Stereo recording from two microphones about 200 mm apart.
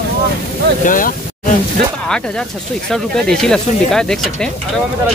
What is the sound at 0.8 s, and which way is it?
Speech, 40° left (ahead or behind).